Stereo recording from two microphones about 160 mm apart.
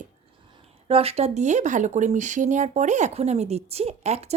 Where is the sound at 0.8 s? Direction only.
35° right (ahead or behind).